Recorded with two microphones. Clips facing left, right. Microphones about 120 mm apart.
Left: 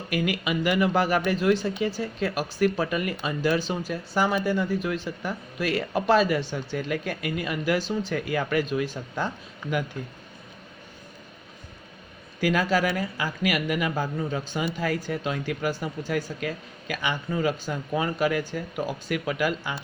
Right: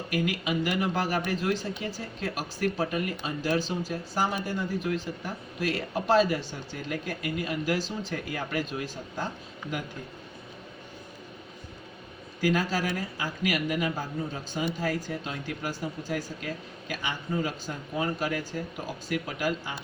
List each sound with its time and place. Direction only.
0.1 s speech: 75° left (ahead or behind)
12.4 s speech: 75° left (ahead or behind)